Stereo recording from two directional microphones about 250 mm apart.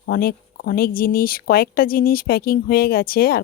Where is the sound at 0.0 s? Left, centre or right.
Left.